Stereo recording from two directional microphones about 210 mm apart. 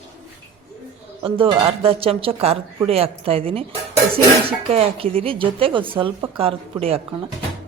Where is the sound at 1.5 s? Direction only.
25° right (ahead or behind).